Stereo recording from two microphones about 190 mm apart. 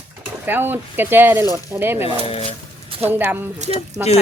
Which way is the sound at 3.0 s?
10° right (ahead or behind).